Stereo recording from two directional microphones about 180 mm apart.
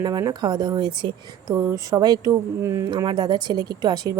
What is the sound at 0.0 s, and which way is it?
Speech, 20° right (ahead or behind).